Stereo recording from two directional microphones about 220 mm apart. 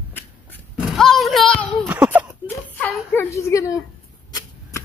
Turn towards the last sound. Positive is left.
turn(degrees=15)  # may be behind; listen again after turning